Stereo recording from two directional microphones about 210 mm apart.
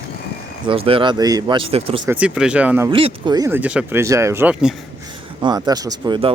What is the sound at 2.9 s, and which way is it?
Speech, 25° right (ahead or behind).